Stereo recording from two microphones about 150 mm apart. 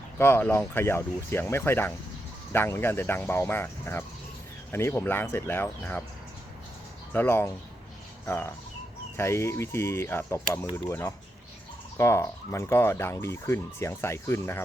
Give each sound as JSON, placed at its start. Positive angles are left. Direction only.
{"t": 0.2, "sound": "speech", "side_deg": 15}
{"t": 7.1, "sound": "speech", "side_deg": 15}